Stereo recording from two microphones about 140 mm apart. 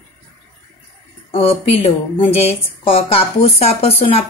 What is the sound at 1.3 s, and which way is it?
Speech, 45° left (ahead or behind).